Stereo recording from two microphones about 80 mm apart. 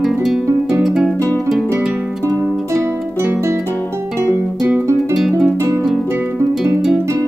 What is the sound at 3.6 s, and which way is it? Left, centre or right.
Guitar, left.